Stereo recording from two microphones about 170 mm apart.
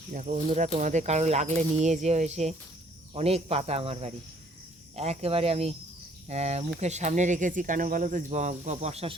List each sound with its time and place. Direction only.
0.1 s speech: 45° right (ahead or behind)